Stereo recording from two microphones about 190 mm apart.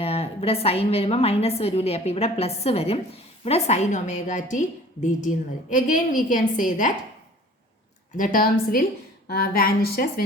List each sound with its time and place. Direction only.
0.0 s a woman's voice: 30° left (ahead or behind)
5.7 s a woman's voice: 45° left (ahead or behind)
8.1 s a woman's voice: 45° left (ahead or behind)